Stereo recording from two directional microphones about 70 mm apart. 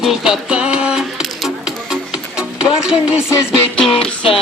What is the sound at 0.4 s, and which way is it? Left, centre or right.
Music, centre.